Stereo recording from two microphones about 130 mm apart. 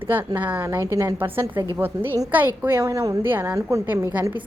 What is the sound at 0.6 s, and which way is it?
A woman's voice, 25° right (ahead or behind).